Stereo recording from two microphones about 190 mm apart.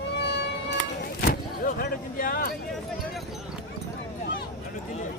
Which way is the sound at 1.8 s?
45° left (ahead or behind).